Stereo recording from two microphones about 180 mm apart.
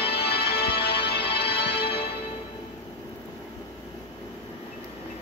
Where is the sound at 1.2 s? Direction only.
30° left (ahead or behind).